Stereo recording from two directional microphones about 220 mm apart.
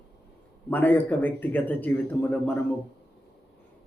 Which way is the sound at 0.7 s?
5° left (ahead or behind).